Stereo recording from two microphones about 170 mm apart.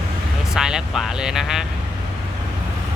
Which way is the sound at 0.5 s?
5° right (ahead or behind).